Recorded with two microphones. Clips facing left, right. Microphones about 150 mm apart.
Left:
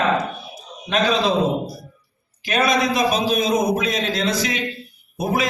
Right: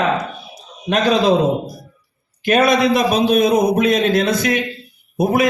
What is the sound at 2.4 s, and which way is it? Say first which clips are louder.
A man's voice: right 5 dB; 60° right (ahead or behind).